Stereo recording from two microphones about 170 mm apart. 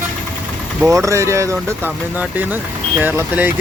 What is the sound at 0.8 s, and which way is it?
Speech, 20° right (ahead or behind).